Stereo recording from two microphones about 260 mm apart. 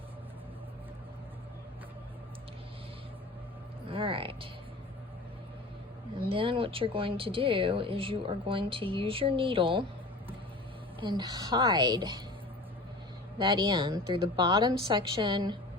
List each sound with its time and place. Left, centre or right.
3.8 s music: centre
6.2 s speech: centre
11.0 s a woman's voice: centre
13.4 s a woman's voice: centre